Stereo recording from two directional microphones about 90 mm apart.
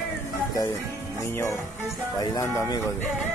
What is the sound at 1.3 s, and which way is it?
Speech, 30° left (ahead or behind).